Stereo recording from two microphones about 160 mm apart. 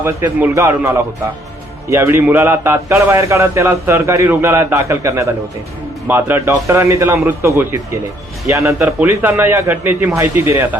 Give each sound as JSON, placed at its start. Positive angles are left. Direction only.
{"t": 0.0, "sound": "a man's voice", "side_deg": -15}